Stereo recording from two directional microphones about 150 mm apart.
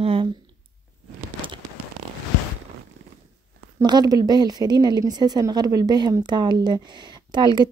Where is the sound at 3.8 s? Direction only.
25° right (ahead or behind).